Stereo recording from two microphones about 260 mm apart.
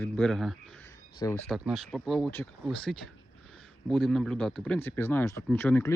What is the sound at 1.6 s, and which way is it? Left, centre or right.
Speech, centre.